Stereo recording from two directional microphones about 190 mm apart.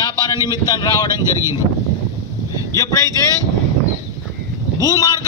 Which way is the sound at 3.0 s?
20° right (ahead or behind).